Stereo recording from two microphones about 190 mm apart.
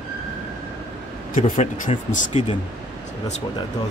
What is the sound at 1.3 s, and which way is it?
Speech, 45° left (ahead or behind).